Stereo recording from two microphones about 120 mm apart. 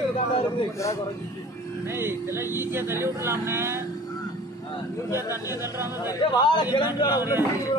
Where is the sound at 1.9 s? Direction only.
20° right (ahead or behind).